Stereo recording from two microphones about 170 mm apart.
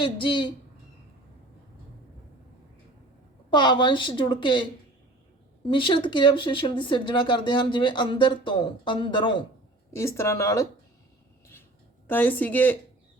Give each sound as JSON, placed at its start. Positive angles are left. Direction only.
{"t": 0.0, "sound": "speech", "side_deg": 30}
{"t": 3.5, "sound": "speech", "side_deg": 25}
{"t": 5.6, "sound": "speech", "side_deg": 30}
{"t": 9.9, "sound": "speech", "side_deg": 15}
{"t": 12.0, "sound": "speech", "side_deg": 10}